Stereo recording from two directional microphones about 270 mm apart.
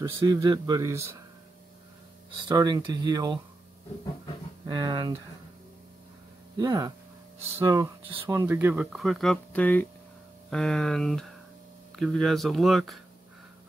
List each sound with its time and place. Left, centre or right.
0.0 s speech: centre
2.4 s speech: centre
4.6 s speech: centre
6.5 s speech: centre